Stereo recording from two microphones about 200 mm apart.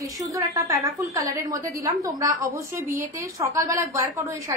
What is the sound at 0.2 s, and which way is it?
A woman's voice, 15° right (ahead or behind).